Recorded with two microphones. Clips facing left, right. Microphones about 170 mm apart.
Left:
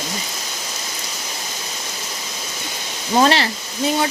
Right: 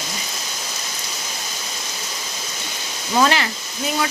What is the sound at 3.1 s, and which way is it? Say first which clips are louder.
Speech: left 2 dB; 30° left (ahead or behind).